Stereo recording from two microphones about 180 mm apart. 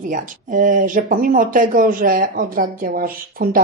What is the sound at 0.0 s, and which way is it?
Speech, 45° right (ahead or behind).